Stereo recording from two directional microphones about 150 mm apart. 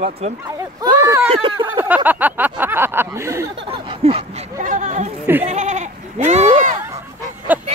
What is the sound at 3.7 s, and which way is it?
Speech, 40° right (ahead or behind).